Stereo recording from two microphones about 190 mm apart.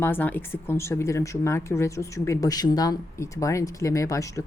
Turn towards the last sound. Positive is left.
turn(degrees=15)  # may be behind; listen again after turning